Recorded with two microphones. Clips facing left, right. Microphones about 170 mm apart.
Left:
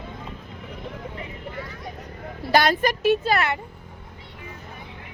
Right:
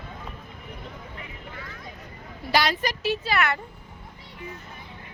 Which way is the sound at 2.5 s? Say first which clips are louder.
Left 5 dB; 50° left (ahead or behind).